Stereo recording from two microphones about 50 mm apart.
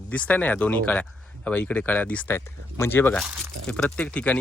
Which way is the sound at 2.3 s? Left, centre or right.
Left.